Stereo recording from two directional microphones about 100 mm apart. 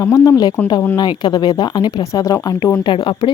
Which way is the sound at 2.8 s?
50° left (ahead or behind).